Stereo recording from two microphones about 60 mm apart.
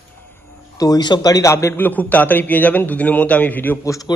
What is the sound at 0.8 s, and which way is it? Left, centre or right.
Speech, left.